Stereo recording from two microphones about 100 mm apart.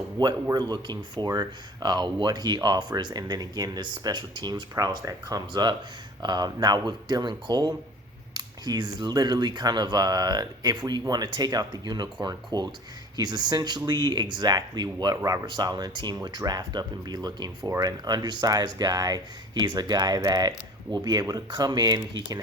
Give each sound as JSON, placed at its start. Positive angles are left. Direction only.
{"t": 0.2, "sound": "speech", "side_deg": -45}
{"t": 15.4, "sound": "speech", "side_deg": -45}